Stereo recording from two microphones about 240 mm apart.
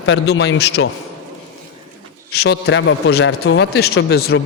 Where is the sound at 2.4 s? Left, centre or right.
Left.